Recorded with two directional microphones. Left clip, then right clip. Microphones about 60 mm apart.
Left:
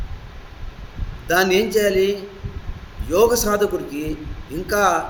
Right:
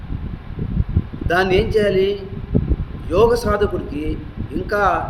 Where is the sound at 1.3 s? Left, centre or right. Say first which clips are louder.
Even; right.